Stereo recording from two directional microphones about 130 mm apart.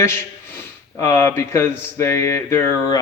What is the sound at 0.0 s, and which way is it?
A man's voice, 20° left (ahead or behind).